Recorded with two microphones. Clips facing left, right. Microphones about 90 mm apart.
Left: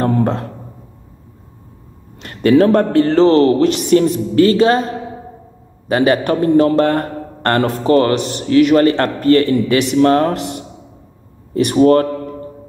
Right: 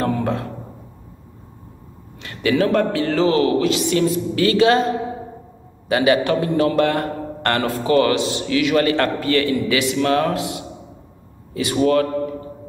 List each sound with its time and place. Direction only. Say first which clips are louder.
0.0 s a sound: left 5 dB; 40° left (ahead or behind)
2.2 s a man's voice: left 7 dB; 40° left (ahead or behind)
5.9 s a man's voice: left 3 dB; 35° left (ahead or behind)
11.7 s a man's voice: left 6 dB; 40° left (ahead or behind)